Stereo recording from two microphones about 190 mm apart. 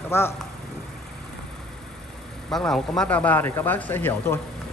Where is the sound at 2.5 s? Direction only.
5° left (ahead or behind).